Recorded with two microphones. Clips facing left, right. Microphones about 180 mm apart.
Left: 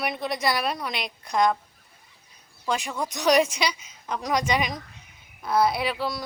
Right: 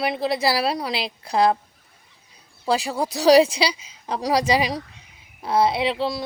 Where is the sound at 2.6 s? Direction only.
35° right (ahead or behind).